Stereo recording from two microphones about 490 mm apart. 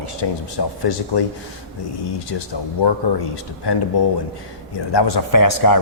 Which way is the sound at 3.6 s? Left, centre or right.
Left.